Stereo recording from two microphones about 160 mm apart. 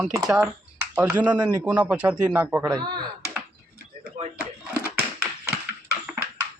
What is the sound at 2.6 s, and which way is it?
Speech, 25° right (ahead or behind).